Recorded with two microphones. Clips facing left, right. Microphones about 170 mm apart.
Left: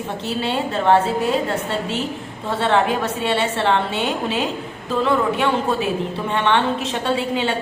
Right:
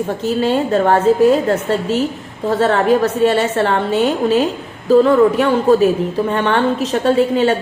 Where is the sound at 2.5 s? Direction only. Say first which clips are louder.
Right 5 dB; 40° right (ahead or behind).